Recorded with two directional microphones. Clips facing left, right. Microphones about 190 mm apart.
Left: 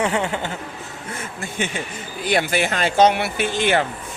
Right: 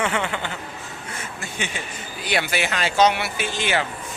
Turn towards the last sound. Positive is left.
turn(degrees=55)  # may be behind; listen again after turning